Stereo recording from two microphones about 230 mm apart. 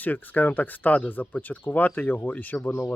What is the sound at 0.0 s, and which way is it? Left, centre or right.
Speech, centre.